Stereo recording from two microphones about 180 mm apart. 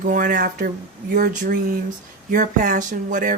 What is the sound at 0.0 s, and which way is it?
Speech, 50° right (ahead or behind).